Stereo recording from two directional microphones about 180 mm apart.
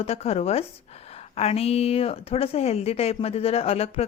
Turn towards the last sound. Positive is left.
turn(degrees=35)  # may be behind; listen again after turning